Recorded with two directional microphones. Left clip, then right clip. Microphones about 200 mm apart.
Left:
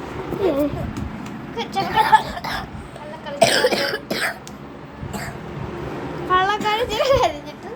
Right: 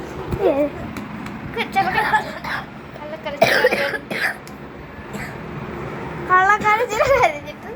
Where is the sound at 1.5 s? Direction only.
20° right (ahead or behind).